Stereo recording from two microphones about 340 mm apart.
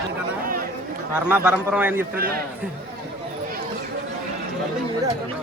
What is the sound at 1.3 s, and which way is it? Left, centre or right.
Speech, centre.